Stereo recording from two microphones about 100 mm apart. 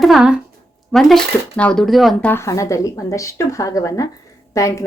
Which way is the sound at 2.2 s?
25° left (ahead or behind).